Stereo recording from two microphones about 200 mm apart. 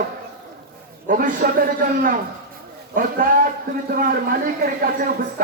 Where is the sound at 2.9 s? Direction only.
40° right (ahead or behind).